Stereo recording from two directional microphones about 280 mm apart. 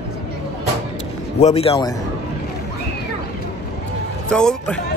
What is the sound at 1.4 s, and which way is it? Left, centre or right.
Speech, left.